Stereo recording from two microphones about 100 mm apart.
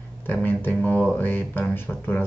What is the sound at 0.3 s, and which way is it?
Speech, 20° left (ahead or behind).